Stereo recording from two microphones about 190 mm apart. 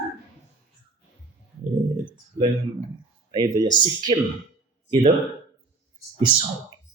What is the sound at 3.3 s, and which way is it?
Speech, 20° right (ahead or behind).